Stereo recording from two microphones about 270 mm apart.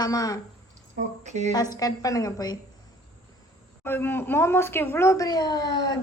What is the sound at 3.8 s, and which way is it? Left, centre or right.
A woman's voice, centre.